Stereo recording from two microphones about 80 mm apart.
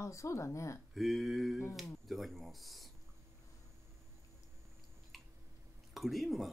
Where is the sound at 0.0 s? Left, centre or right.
Left.